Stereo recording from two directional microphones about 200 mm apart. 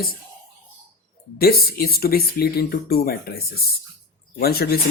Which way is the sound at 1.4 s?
50° left (ahead or behind).